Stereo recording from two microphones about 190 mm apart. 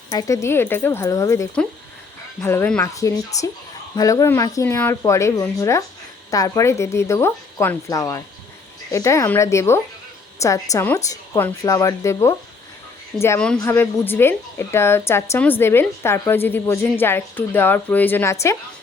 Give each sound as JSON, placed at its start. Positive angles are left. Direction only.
{"t": 0.1, "sound": "a woman's voice", "side_deg": 15}